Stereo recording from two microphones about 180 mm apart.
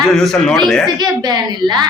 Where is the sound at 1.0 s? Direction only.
25° right (ahead or behind).